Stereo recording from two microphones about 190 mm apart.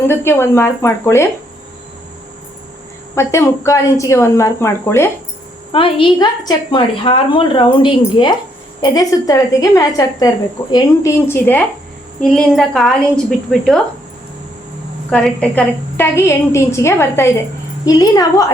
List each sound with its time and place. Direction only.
0.1 s a woman's voice: 10° left (ahead or behind)
3.2 s a woman's voice: 15° left (ahead or behind)
5.7 s a woman's voice: 25° left (ahead or behind)
12.2 s a woman's voice: 5° left (ahead or behind)
15.1 s a woman's voice: 5° left (ahead or behind)